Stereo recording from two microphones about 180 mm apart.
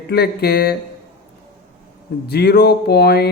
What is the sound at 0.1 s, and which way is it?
Mantra, 60° left (ahead or behind).